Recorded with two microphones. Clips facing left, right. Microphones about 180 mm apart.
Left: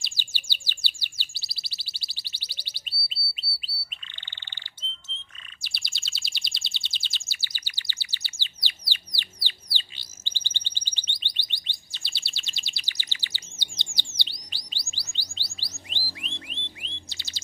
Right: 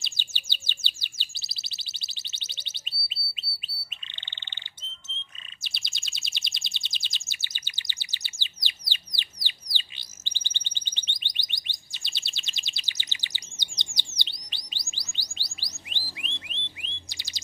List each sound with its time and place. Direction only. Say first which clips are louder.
0.0 s chirp: even; 20° right (ahead or behind)
5.6 s bird: even; 20° right (ahead or behind)
10.2 s alarm: left 1 dB; 15° right (ahead or behind)
14.2 s chirp: left 1 dB; 20° right (ahead or behind)
15.1 s music: left 1 dB; 15° right (ahead or behind)
16.2 s music: left 3 dB; 15° left (ahead or behind)
17.1 s chirp: left 2 dB; 15° right (ahead or behind)